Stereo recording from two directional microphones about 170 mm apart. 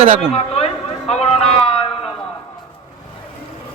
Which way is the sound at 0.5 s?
40° left (ahead or behind).